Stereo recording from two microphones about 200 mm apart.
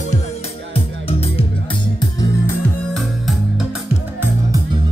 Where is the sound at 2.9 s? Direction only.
Centre (ahead or behind).